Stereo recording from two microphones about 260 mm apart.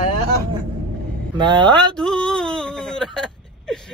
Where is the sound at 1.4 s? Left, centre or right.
Centre.